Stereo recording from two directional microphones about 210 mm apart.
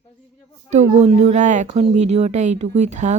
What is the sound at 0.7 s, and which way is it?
Speech, 35° right (ahead or behind).